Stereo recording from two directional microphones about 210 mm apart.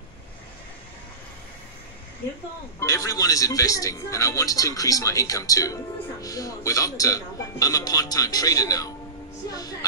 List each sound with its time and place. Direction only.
2.8 s a man's voice: 15° left (ahead or behind)
9.5 s music: 15° left (ahead or behind)